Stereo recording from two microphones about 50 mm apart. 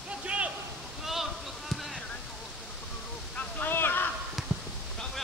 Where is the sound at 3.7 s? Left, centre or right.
Left.